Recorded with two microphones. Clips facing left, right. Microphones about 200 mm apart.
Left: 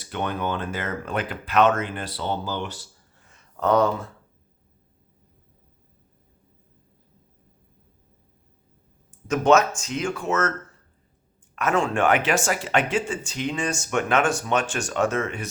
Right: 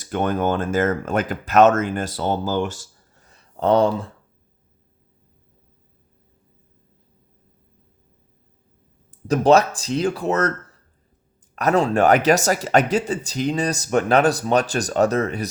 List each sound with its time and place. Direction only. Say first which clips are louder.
0.0 s speech: right 6 dB; 45° right (ahead or behind); by 4.1 s 30° right (ahead or behind)
9.0 s speech: right 3 dB; 35° right (ahead or behind)
11.5 s speech: right 5 dB; 35° right (ahead or behind)